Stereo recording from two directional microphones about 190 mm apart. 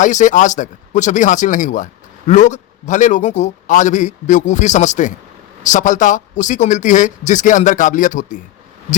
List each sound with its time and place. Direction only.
0.0 s speech: 40° left (ahead or behind)